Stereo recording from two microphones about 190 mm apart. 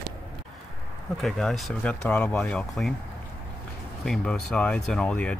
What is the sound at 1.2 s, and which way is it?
Speech, centre (ahead or behind).